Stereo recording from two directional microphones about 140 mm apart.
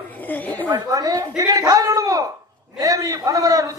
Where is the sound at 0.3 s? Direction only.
10° left (ahead or behind).